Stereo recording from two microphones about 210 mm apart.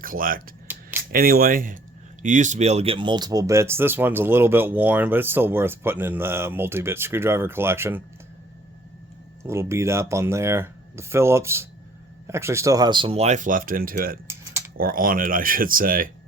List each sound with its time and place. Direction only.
0.0 s speech: 40° right (ahead or behind)
0.7 s a sound: 10° right (ahead or behind)
1.1 s speech: 45° right (ahead or behind); by 8.0 s 10° right (ahead or behind)
9.4 s speech: 10° right (ahead or behind); by 16.1 s 40° right (ahead or behind)